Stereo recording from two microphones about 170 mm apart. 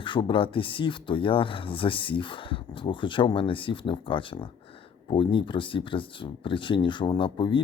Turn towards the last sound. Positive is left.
turn(degrees=30)  # may be behind; listen again after turning